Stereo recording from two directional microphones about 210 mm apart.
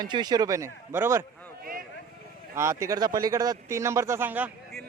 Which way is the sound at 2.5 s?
15° right (ahead or behind).